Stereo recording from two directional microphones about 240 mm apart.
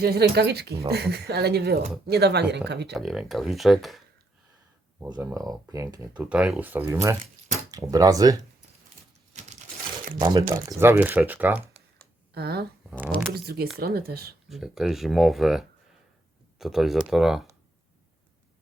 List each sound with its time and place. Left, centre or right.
0.0 s speech: right
2.9 s speech: centre
5.0 s speech: centre
10.2 s speech: centre
12.3 s speech: right
14.5 s speech: centre